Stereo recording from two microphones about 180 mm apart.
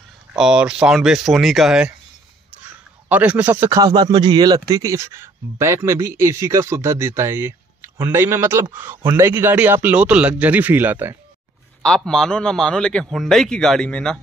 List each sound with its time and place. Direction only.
0.3 s a man's voice: 5° right (ahead or behind)
11.8 s a man's voice: 5° left (ahead or behind)